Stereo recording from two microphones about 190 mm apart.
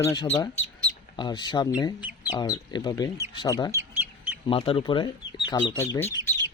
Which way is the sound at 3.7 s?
10° right (ahead or behind).